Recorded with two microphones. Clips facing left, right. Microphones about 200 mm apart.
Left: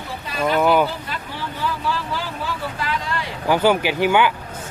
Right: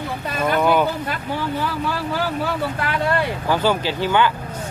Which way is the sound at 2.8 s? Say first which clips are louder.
Right 6 dB; 55° right (ahead or behind).